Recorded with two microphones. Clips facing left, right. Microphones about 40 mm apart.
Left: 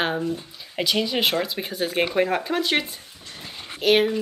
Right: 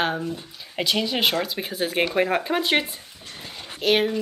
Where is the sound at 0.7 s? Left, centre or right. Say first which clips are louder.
Left 1 dB; centre.